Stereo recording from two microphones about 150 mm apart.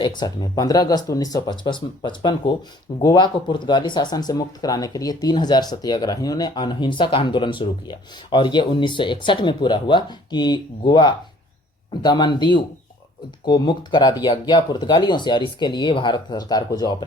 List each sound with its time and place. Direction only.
0.0 s speech: 30° left (ahead or behind)